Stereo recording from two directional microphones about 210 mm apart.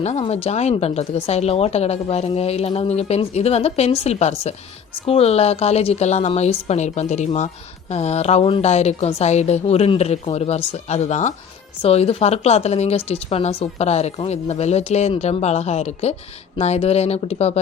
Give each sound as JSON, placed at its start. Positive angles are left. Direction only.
{"t": 0.0, "sound": "a woman's voice", "side_deg": 30}